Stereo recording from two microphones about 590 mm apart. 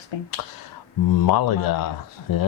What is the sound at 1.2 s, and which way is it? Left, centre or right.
Speech, left.